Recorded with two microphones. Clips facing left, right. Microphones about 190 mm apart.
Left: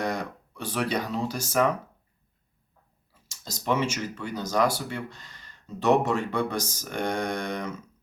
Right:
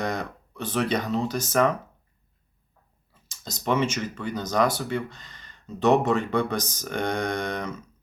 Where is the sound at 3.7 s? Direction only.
10° left (ahead or behind).